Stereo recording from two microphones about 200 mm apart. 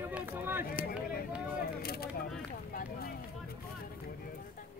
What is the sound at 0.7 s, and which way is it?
Speech, 50° left (ahead or behind).